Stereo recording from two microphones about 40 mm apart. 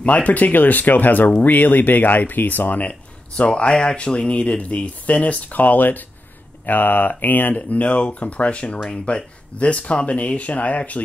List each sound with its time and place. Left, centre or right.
0.0 s speech: left
2.8 s speech: left
7.5 s speech: left